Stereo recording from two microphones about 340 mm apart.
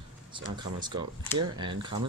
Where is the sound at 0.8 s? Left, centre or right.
Centre.